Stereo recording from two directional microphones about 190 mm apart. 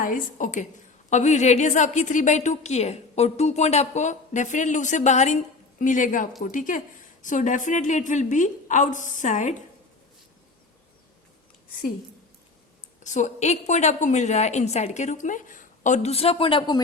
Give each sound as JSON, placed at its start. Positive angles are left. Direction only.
{"t": 0.0, "sound": "a woman's voice", "side_deg": 45}
{"t": 13.0, "sound": "a woman's voice", "side_deg": 40}